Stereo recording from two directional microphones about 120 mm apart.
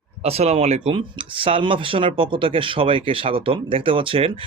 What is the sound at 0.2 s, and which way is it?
Speech, 60° right (ahead or behind).